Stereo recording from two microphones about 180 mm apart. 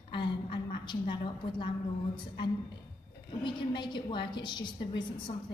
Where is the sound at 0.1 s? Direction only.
30° left (ahead or behind).